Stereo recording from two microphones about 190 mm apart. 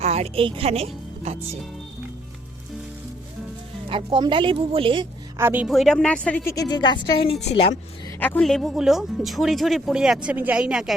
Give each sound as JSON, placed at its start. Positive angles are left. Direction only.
{"t": 0.0, "sound": "a woman's voice", "side_deg": -35}
{"t": 3.8, "sound": "speech", "side_deg": -25}
{"t": 5.4, "sound": "a woman's voice", "side_deg": -10}
{"t": 5.6, "sound": "a woman's voice", "side_deg": 0}
{"t": 8.2, "sound": "speech", "side_deg": 5}